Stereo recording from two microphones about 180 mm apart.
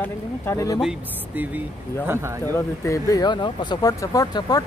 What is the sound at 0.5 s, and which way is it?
Speech, 15° left (ahead or behind).